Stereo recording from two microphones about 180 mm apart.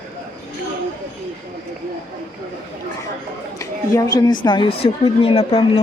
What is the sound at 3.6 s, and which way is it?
A woman's voice, 20° left (ahead or behind).